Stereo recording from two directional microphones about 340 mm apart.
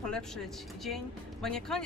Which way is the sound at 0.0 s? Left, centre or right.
Centre.